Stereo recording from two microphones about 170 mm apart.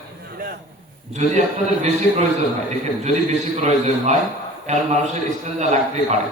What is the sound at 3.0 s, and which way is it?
A man's voice, 40° right (ahead or behind).